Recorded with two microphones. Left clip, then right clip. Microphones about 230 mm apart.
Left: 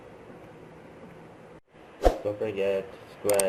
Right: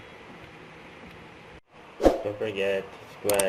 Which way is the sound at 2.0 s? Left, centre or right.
Centre.